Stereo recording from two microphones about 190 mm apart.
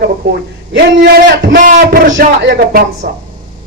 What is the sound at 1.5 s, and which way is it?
A man's voice, 45° right (ahead or behind).